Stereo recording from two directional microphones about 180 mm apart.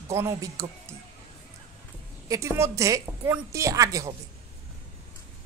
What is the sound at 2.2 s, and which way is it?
A woman's voice, 20° right (ahead or behind).